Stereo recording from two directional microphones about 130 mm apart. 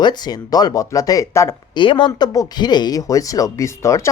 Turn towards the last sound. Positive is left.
turn(degrees=25)  # may be behind; listen again after turning